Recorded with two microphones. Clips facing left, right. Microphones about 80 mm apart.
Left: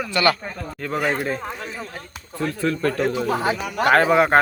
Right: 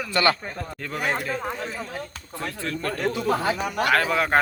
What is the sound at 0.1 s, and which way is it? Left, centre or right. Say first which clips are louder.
Speech: left 2 dB; right.